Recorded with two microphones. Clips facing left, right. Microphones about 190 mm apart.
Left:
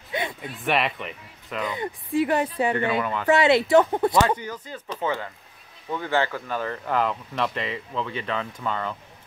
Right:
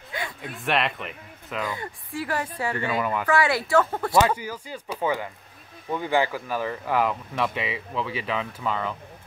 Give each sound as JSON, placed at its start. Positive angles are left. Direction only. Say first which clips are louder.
{"t": 0.1, "sound": "a sound", "louder": "left 5 dB", "side_deg": 20}
{"t": 0.6, "sound": "speech", "louder": "left 1 dB", "side_deg": 0}
{"t": 1.7, "sound": "speech", "louder": "left 6 dB", "side_deg": 20}
{"t": 3.0, "sound": "speech", "louder": "right 1 dB", "side_deg": -10}
{"t": 3.3, "sound": "speech", "louder": "left 7 dB", "side_deg": 25}
{"t": 4.4, "sound": "speech", "louder": "even", "side_deg": -10}